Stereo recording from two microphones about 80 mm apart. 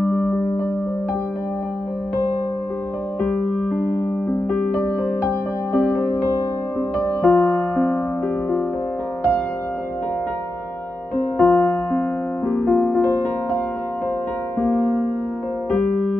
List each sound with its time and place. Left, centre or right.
0.0 s music: left
3.2 s keyboard: centre
4.5 s music: centre
4.8 s music: left
11.3 s music: left
11.9 s music: left
14.6 s music: left
15.7 s music: centre